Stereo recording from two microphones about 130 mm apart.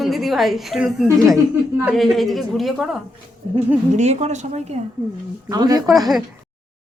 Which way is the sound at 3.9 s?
55° right (ahead or behind).